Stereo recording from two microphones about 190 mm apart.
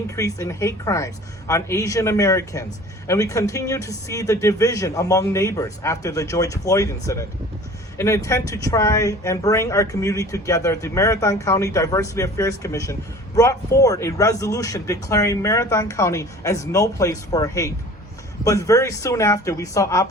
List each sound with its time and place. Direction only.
0.2 s speech: 15° left (ahead or behind)